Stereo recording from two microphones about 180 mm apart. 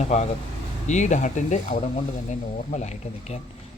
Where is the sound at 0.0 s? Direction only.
40° left (ahead or behind).